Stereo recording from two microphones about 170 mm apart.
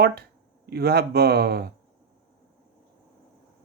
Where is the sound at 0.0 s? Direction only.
70° right (ahead or behind).